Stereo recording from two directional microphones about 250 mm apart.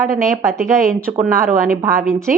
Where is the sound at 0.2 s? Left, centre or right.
Centre.